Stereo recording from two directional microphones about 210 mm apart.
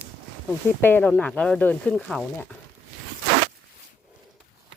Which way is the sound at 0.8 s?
10° left (ahead or behind).